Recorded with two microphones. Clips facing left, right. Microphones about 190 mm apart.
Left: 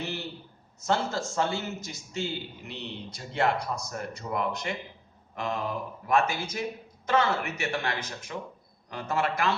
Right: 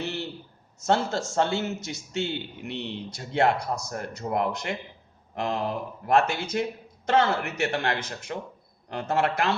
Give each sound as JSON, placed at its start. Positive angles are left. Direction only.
{"t": 0.9, "sound": "a man's voice", "side_deg": -65}
{"t": 5.3, "sound": "a sound", "side_deg": -60}
{"t": 6.1, "sound": "a man's voice", "side_deg": -65}